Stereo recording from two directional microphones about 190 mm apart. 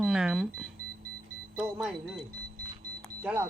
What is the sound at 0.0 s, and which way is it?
Speech, 5° right (ahead or behind).